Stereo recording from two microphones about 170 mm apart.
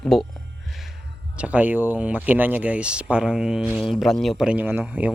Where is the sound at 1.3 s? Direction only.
10° right (ahead or behind).